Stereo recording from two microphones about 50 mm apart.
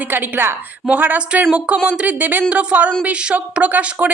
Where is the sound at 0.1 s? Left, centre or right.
Right.